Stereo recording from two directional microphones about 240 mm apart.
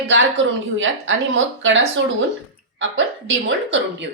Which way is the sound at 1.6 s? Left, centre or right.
Right.